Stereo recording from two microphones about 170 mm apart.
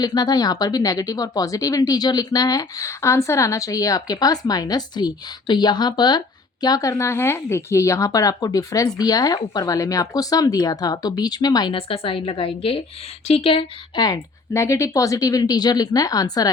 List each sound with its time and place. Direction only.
0.0 s speech: 25° left (ahead or behind)